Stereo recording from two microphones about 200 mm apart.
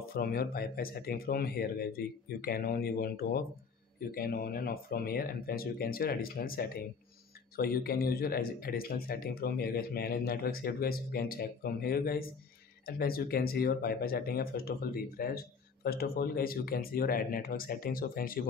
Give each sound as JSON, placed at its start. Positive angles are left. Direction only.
{"t": 0.1, "sound": "speech", "side_deg": 50}